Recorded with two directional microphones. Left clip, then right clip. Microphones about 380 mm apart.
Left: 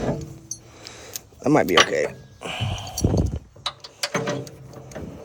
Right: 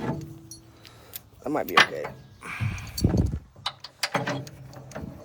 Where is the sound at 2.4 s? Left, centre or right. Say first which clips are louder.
Left 6 dB; centre.